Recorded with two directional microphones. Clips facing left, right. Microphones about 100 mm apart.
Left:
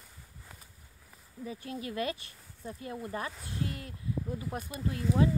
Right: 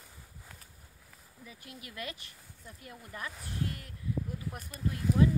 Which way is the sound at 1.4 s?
30° left (ahead or behind).